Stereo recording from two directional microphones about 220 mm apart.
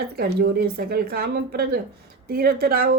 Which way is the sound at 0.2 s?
45° right (ahead or behind).